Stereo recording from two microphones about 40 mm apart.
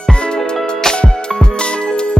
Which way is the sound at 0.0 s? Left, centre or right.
Left.